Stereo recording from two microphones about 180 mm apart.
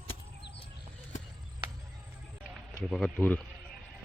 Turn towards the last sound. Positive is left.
turn(degrees=10)  # may be behind; listen again after turning